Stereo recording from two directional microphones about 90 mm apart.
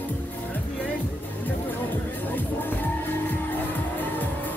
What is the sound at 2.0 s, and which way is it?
Music, 20° left (ahead or behind).